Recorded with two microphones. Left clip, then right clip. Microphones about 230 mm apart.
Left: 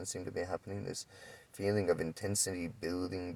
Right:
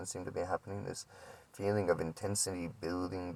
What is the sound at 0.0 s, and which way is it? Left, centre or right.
Speech, left.